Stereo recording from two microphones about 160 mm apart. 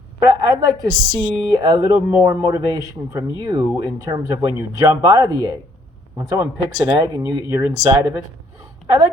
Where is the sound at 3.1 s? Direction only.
25° right (ahead or behind).